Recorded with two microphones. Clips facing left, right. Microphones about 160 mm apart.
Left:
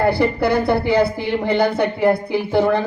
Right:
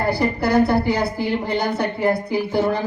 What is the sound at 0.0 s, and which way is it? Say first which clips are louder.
A man's voice: left 3 dB; 60° left (ahead or behind).